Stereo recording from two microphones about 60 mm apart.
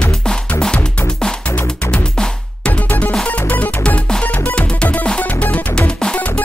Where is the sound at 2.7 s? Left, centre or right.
Left.